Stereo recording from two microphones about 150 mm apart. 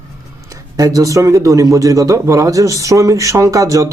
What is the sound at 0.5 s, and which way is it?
Speech, 20° right (ahead or behind).